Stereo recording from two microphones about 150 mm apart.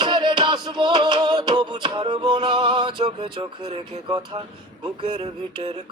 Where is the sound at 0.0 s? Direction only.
30° right (ahead or behind).